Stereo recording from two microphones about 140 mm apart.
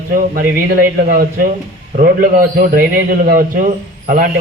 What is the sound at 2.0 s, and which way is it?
A man's voice, 80° right.